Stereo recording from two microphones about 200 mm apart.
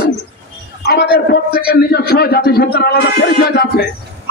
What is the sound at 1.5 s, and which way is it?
A man's voice, 50° left (ahead or behind).